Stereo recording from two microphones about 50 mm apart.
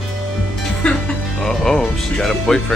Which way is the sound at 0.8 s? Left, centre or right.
Left.